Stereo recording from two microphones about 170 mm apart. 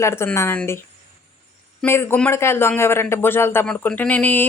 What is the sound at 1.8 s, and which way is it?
Speech, 15° left (ahead or behind).